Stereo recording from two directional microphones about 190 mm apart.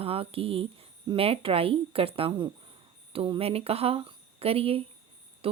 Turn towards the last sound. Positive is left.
turn(degrees=-30)  # may be behind; listen again after turning